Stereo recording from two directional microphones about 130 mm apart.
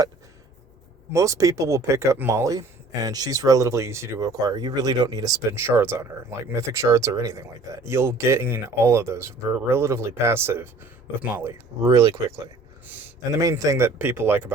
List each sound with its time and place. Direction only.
1.1 s speech: 25° right (ahead or behind)